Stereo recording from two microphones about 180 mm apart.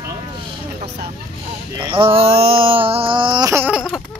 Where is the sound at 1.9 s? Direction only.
30° right (ahead or behind); by 4.0 s 5° right (ahead or behind).